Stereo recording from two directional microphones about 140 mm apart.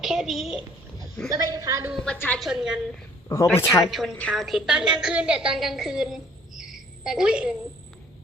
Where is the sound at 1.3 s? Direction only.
25° right (ahead or behind).